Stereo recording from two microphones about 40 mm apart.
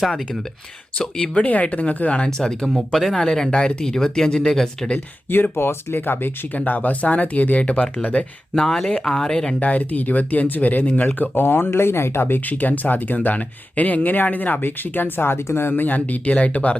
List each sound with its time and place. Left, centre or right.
0.9 s speech: left
2.1 s speech: left
2.9 s speech: centre
3.5 s speech: left
5.3 s speech: left
6.7 s speech: left
8.5 s speech: centre
9.6 s speech: left
11.3 s speech: left
15.7 s speech: left